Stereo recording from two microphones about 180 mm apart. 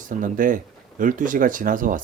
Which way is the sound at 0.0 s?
45° right (ahead or behind).